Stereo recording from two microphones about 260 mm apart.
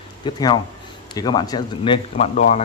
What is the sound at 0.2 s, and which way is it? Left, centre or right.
Speech, centre.